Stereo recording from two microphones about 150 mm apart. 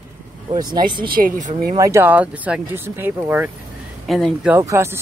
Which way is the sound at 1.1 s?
60° right (ahead or behind).